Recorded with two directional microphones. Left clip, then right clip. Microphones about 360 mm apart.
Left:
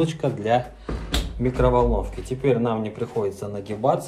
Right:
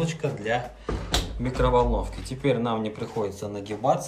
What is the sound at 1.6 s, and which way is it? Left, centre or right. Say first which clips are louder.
Speech: left 2 dB; centre.